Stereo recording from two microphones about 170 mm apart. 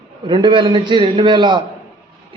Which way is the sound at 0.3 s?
30° right (ahead or behind).